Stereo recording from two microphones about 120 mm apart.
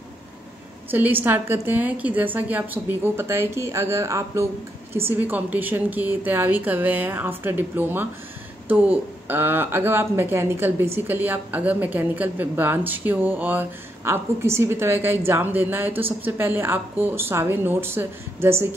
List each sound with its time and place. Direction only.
0.8 s speech: 15° right (ahead or behind)